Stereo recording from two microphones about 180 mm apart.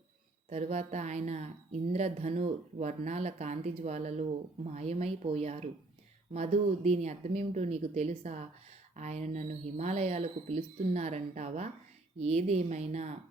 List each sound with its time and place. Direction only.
0.5 s speech: 40° right (ahead or behind)